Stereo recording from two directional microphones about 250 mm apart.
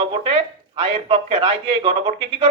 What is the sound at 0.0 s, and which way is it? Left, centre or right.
A man's voice, right.